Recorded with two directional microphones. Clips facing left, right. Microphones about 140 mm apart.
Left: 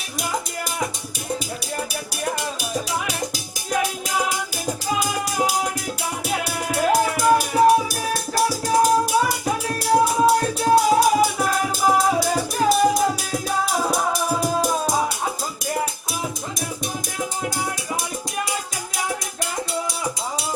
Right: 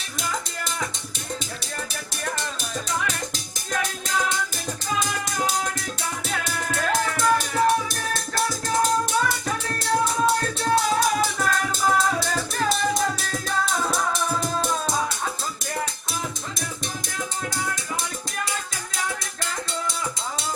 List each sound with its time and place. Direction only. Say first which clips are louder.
0.2 s music: left 4 dB; 10° left (ahead or behind)
2.2 s music: left 4 dB; 15° left (ahead or behind)
6.2 s music: left 5 dB; 10° left (ahead or behind)
8.4 s music: left 5 dB; 10° left (ahead or behind)
14.9 s music: left 4 dB; 20° left (ahead or behind)
17.2 s music: left 3 dB; 20° left (ahead or behind)